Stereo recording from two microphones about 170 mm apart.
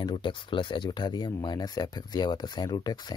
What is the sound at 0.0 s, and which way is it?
Speech, 30° left (ahead or behind).